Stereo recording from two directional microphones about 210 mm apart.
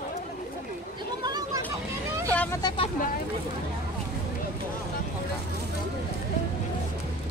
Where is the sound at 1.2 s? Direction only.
20° right (ahead or behind).